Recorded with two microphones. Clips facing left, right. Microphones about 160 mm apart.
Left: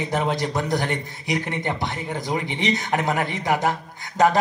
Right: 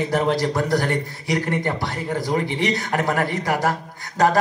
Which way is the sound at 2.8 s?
45° right (ahead or behind).